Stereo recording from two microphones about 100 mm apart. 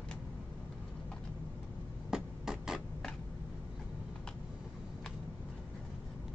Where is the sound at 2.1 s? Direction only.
5° right (ahead or behind).